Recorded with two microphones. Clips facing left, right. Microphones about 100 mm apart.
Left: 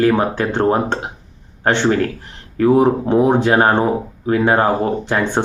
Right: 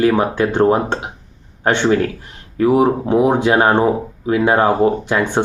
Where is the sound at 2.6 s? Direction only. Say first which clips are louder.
Left 1 dB; 15° right (ahead or behind).